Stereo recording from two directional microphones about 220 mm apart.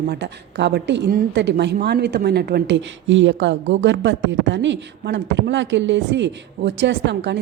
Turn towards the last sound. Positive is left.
turn(degrees=-55)  # may be behind; listen again after turning